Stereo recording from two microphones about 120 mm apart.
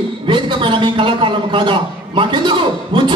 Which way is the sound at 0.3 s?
40° right (ahead or behind).